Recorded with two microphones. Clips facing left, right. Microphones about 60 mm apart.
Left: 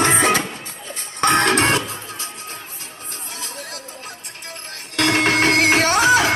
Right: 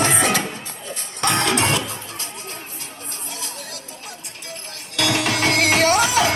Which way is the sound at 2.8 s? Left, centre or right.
Left.